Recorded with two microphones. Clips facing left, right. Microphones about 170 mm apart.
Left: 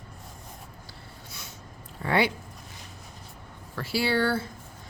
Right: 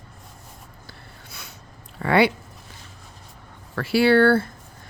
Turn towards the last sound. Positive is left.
turn(degrees=-60)  # may be behind; listen again after turning